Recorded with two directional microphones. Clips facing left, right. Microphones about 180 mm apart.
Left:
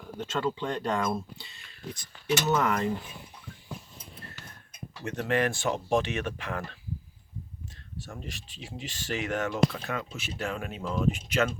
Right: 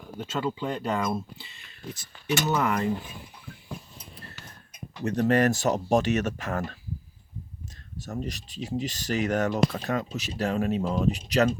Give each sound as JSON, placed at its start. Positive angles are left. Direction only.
{"t": 0.2, "sound": "speech", "side_deg": -5}
{"t": 5.0, "sound": "speech", "side_deg": -40}
{"t": 7.9, "sound": "speech", "side_deg": -40}